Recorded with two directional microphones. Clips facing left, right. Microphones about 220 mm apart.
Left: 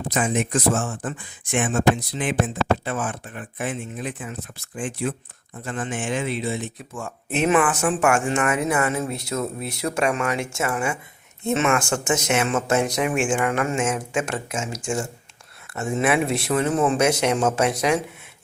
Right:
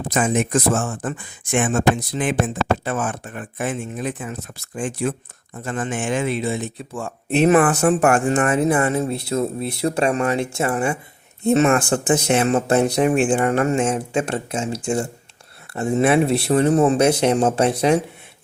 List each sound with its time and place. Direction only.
0.1 s speech: 45° right (ahead or behind)
6.7 s speech: 30° right (ahead or behind)